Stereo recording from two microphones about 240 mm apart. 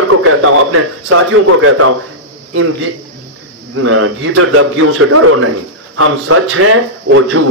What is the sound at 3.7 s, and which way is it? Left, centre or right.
A man's voice, right.